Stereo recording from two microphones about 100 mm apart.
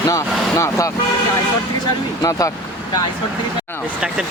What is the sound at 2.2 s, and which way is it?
Speech, 35° left (ahead or behind).